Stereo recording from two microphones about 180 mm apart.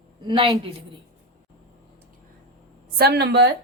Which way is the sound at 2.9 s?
65° right (ahead or behind).